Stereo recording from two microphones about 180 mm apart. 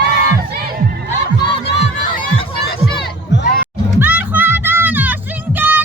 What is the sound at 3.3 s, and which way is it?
Music, 70° left (ahead or behind).